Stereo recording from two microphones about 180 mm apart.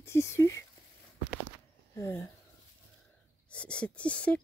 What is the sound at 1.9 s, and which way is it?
Speech, 15° left (ahead or behind).